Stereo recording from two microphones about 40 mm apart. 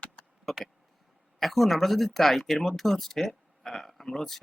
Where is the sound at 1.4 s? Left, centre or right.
Centre.